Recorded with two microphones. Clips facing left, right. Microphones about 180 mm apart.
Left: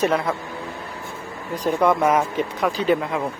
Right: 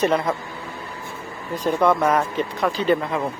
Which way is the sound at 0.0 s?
Centre (ahead or behind).